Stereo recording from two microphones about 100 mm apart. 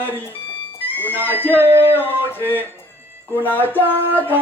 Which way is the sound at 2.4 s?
20° left (ahead or behind).